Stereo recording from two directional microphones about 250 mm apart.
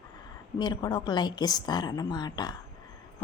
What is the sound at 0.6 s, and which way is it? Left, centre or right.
A woman's voice, centre.